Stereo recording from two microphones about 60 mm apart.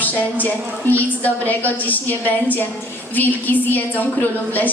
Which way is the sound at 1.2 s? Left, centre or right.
Left.